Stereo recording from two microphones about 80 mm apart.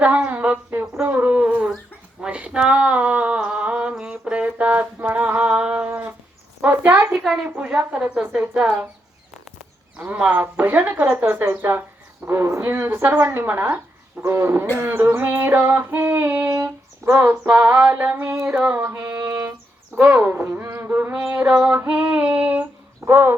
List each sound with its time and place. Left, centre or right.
0.0 s a sound: centre
7.4 s a woman's voice: centre
10.2 s female singing: right
12.2 s a woman's voice: right
14.8 s female singing: right
16.5 s a sound: right
17.5 s female singing: right
18.5 s female singing: centre
18.8 s music: right
20.0 s speech: right
20.7 s female singing: right